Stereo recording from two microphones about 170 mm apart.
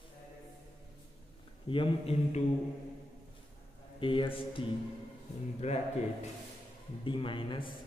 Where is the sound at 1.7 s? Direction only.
35° left (ahead or behind).